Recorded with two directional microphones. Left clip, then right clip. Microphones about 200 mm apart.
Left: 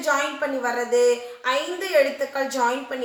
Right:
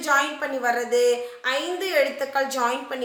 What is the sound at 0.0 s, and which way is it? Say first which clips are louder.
A woman's voice: right 1 dB; 40° right (ahead or behind).